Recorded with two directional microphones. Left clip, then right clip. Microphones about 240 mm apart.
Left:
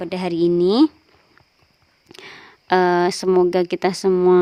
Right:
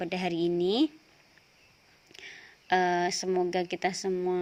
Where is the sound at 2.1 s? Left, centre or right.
Left.